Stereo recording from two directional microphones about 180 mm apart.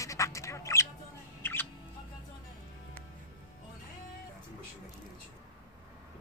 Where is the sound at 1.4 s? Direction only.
10° left (ahead or behind).